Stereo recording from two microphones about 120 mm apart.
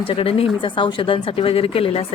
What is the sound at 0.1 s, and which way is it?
A woman's voice, 50° left (ahead or behind).